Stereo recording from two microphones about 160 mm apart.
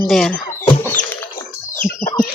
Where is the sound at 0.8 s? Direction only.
10° left (ahead or behind).